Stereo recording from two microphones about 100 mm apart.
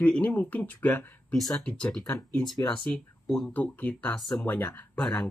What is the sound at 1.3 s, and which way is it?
Speech, 5° left (ahead or behind).